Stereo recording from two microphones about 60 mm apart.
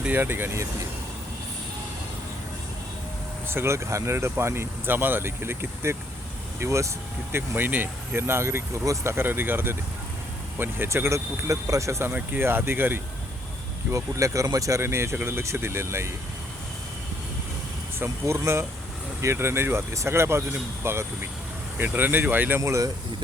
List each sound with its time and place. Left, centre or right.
0.2 s speech: right
3.5 s speech: right
6.6 s speech: right
7.3 s speech: right
9.1 s speech: right
10.8 s speech: right
12.4 s speech: right
13.9 s speech: right
14.8 s speech: right
18.0 s speech: right
21.8 s speech: right
22.6 s speech: right